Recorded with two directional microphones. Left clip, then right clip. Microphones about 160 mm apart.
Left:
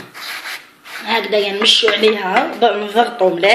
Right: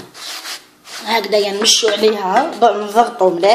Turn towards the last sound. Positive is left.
turn(degrees=-10)  # may be behind; listen again after turning